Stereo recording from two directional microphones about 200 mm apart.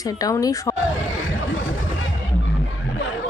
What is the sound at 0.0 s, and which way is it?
Speech, 15° left (ahead or behind).